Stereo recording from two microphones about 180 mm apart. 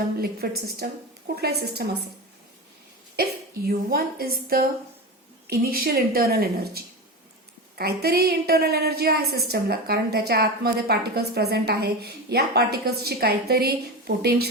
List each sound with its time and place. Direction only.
0.2 s a woman's voice: 60° right (ahead or behind)
3.7 s a woman's voice: 55° right (ahead or behind)